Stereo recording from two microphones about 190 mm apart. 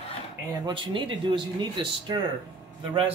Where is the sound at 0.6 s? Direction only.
25° right (ahead or behind).